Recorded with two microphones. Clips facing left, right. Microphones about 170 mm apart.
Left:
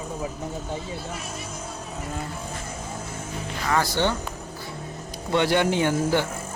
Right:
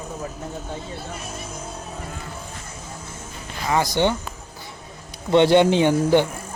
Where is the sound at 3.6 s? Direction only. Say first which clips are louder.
Right 3 dB; 15° right (ahead or behind).